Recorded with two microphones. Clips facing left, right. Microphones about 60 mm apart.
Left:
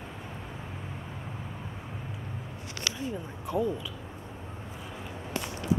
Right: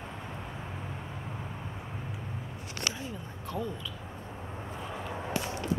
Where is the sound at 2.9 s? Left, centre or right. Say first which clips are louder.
Even; right.